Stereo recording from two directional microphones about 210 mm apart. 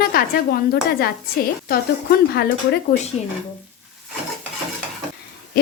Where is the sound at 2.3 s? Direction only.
50° left (ahead or behind).